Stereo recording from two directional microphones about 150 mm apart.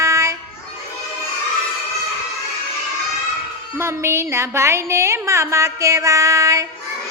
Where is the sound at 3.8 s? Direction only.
15° right (ahead or behind).